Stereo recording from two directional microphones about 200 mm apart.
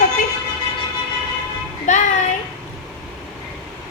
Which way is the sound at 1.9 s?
35° left (ahead or behind).